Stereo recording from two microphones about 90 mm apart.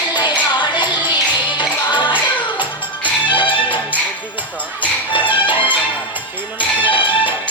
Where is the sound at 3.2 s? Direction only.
65° left (ahead or behind).